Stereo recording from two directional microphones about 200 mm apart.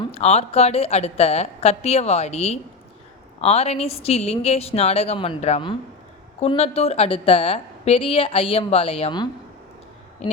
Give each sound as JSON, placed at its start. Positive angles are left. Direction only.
{"t": 0.0, "sound": "a woman's voice", "side_deg": 30}